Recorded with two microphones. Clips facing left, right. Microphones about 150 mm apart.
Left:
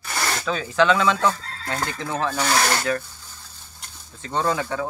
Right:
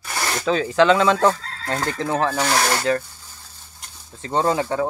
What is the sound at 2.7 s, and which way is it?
Rub, 25° right (ahead or behind).